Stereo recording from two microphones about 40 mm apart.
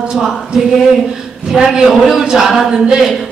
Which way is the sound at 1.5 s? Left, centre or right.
Centre.